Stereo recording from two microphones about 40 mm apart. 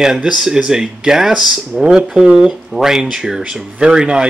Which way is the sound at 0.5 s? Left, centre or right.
Centre.